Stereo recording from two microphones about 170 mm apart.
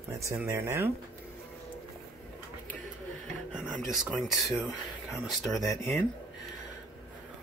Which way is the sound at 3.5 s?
5° right (ahead or behind).